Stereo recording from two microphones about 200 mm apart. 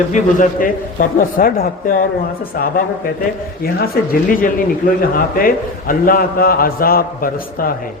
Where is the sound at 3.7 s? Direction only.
50° left (ahead or behind).